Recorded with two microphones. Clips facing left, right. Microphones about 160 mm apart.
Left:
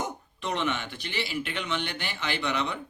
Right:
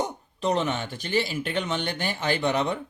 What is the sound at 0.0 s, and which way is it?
Speech, 35° right (ahead or behind).